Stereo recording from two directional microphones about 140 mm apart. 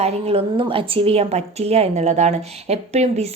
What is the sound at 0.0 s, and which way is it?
A woman's voice, 45° right (ahead or behind).